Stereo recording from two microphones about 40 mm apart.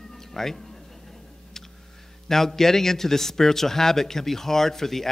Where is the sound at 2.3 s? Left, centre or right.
Centre.